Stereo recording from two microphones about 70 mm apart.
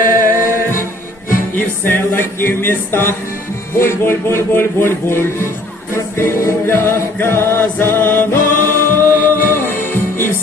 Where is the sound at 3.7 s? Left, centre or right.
Left.